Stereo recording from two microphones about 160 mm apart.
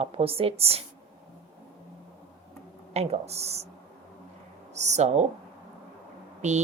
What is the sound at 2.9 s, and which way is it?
Speech, 40° right (ahead or behind).